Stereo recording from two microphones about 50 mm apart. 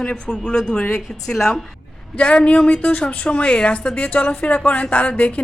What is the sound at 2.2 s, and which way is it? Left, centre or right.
A woman's voice, left.